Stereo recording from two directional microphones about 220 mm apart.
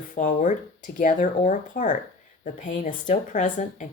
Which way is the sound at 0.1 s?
35° left (ahead or behind).